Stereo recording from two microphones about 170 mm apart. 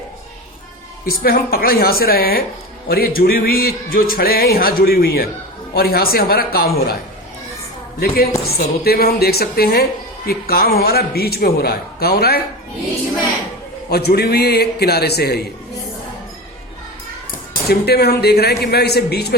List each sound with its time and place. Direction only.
1.0 s speech: 60° left (ahead or behind)
7.9 s speech: 65° left (ahead or behind)
13.9 s speech: 70° left (ahead or behind)
17.5 s speech: 70° left (ahead or behind)